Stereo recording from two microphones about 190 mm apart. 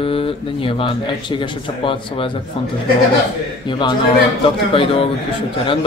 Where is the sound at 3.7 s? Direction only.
25° left (ahead or behind).